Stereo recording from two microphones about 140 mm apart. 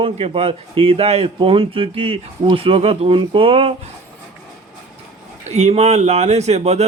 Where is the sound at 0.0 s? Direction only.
45° right (ahead or behind).